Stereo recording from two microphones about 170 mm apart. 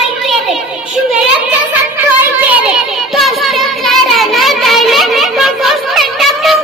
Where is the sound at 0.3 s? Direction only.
Centre (ahead or behind).